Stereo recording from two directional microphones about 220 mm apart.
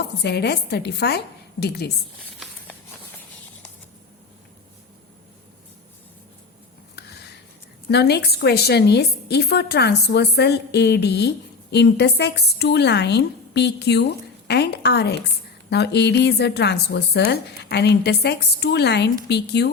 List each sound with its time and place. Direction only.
0.2 s a woman's voice: 50° left (ahead or behind)
6.9 s a sound: 50° left (ahead or behind)
7.9 s a woman's voice: 50° left (ahead or behind)